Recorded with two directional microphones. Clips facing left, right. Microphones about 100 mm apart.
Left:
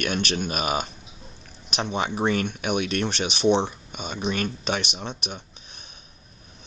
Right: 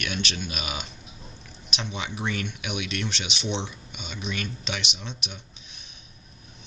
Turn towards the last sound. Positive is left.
turn(degrees=45)  # may be behind; listen again after turning